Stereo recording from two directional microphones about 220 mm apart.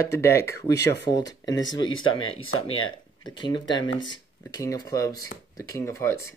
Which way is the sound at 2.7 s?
25° left (ahead or behind).